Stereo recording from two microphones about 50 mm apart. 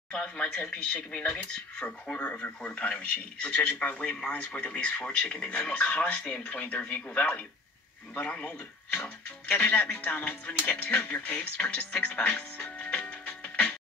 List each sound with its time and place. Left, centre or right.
0.1 s speech: left
12.9 s music: left